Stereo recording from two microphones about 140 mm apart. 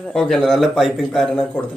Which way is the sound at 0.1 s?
5° left (ahead or behind).